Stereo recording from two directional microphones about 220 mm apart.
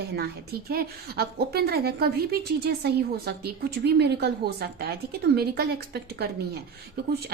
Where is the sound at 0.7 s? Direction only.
45° right (ahead or behind).